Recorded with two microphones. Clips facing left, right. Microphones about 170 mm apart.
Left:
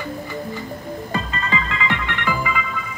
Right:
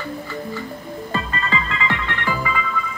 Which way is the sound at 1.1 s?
20° left (ahead or behind).